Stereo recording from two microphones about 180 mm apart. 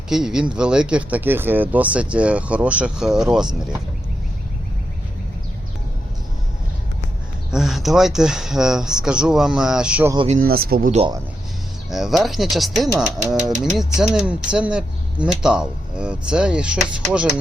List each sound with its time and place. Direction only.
0.1 s speech: 5° right (ahead or behind)
7.5 s speech: centre (ahead or behind)
10.2 s speech: 50° right (ahead or behind)
11.9 s speech: centre (ahead or behind)